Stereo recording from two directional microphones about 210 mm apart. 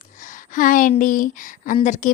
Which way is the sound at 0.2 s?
40° left (ahead or behind).